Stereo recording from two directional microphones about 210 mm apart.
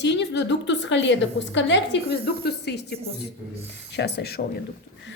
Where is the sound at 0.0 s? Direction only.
55° left (ahead or behind).